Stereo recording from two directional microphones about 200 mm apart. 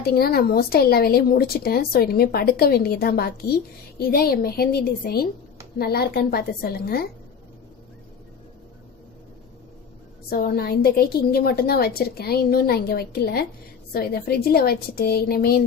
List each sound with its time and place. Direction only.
0.0 s speech: 50° left (ahead or behind)
10.3 s speech: 50° left (ahead or behind)